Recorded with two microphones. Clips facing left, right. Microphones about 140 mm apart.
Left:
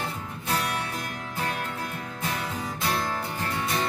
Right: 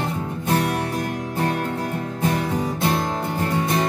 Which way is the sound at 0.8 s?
60° right (ahead or behind).